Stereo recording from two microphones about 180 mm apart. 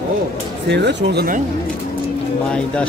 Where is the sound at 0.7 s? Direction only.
75° right (ahead or behind).